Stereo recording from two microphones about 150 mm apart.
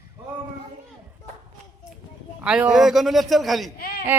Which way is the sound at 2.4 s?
5° right (ahead or behind).